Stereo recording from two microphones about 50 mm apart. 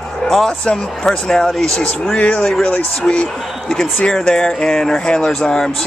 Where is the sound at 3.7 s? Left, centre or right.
Centre.